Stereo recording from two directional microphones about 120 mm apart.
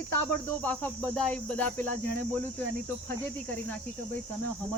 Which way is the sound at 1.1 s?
10° left (ahead or behind).